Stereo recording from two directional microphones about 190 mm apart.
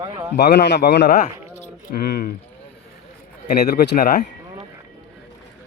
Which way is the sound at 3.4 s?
55° left (ahead or behind).